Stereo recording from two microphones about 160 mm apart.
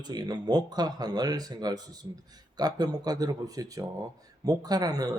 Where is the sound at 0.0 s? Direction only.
25° right (ahead or behind).